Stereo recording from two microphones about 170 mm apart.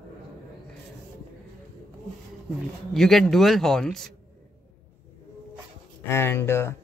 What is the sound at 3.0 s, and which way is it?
Speech, centre (ahead or behind).